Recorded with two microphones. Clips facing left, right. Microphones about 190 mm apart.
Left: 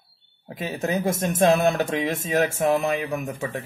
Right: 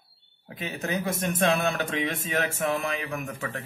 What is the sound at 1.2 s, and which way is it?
Speech, 25° left (ahead or behind).